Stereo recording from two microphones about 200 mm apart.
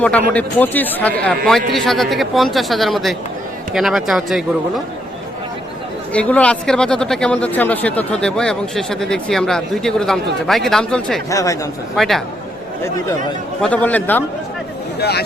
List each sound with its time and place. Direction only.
0.0 s speech: 5° left (ahead or behind)
6.1 s speech: 5° left (ahead or behind)
11.3 s a man's voice: 15° left (ahead or behind)
11.9 s speech: centre (ahead or behind)
13.6 s a man's voice: 5° left (ahead or behind)
14.9 s speech: 55° left (ahead or behind)